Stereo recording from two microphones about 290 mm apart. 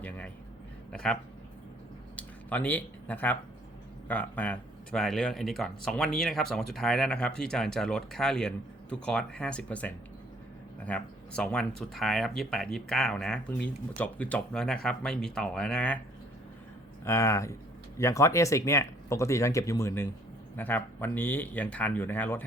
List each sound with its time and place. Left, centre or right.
0.9 s speech: centre
17.1 s speech: centre